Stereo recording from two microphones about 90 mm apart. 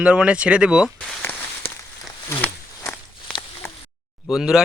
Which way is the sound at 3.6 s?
25° left (ahead or behind).